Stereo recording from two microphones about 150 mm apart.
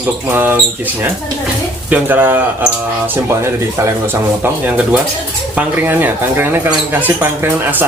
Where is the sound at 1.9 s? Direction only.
10° right (ahead or behind).